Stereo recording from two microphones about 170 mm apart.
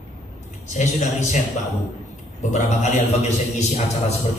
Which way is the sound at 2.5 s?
45° left (ahead or behind).